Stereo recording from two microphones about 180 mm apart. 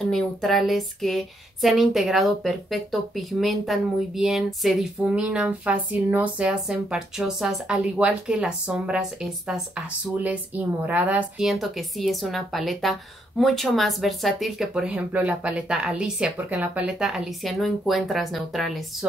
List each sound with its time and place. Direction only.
0.1 s speech: centre (ahead or behind)